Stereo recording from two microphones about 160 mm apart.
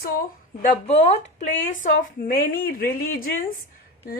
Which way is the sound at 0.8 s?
45° left (ahead or behind).